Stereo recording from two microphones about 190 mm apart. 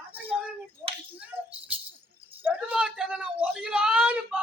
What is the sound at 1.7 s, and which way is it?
Music, 10° right (ahead or behind).